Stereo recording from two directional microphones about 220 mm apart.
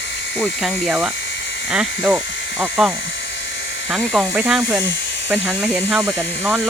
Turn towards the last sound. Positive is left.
turn(degrees=-5)  # may be behind; listen again after turning